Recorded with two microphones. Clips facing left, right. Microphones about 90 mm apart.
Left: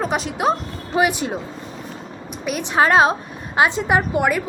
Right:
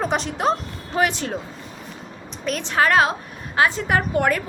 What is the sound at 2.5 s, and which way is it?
A woman's voice, 15° left (ahead or behind).